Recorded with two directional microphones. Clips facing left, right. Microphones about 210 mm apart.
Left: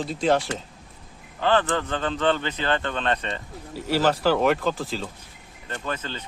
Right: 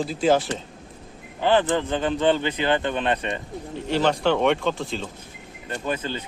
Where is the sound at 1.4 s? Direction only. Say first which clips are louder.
Right 2 dB; 15° right (ahead or behind).